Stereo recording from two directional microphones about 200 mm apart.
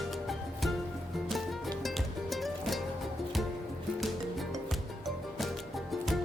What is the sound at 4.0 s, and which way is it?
Music, centre (ahead or behind).